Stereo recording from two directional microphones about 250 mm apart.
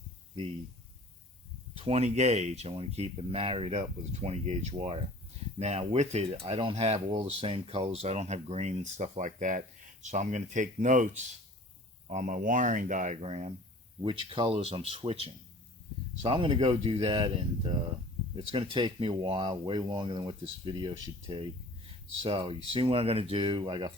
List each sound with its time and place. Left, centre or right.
1.7 s speech: right